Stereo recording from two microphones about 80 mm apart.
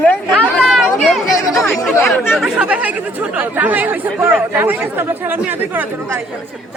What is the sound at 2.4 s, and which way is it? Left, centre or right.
Speech, centre.